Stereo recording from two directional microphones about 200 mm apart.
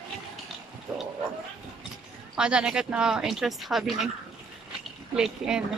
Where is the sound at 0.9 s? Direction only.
5° right (ahead or behind).